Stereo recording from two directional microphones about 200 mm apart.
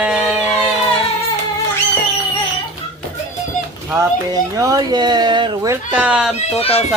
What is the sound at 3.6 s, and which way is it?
Children playing, 40° left (ahead or behind).